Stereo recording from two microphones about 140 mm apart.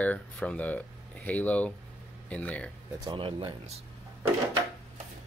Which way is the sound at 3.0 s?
35° right (ahead or behind).